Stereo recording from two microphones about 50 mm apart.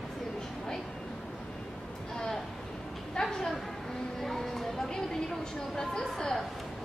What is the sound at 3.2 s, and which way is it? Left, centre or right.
Speech, centre.